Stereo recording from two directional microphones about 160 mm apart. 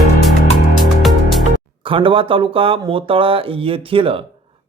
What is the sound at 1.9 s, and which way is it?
Speech, 35° right (ahead or behind).